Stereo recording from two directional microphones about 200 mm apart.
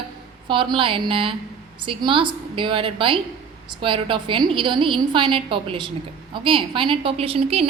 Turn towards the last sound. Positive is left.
turn(degrees=-30)  # may be behind; listen again after turning